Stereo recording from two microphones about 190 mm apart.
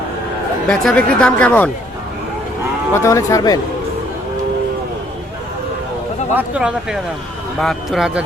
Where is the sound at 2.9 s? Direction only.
15° left (ahead or behind).